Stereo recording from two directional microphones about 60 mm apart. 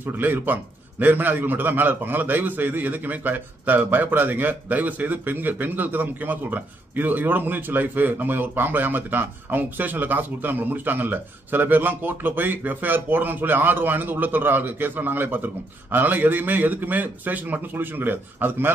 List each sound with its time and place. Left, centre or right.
0.0 s a man's voice: right